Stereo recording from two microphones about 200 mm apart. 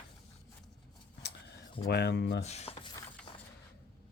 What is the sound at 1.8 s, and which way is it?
Speech, 55° left (ahead or behind).